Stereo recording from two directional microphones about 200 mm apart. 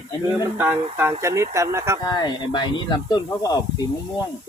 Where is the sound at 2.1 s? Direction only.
20° left (ahead or behind).